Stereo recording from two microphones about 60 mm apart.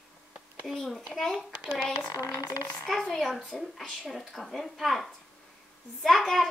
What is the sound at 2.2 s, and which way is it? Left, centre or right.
Speech, left.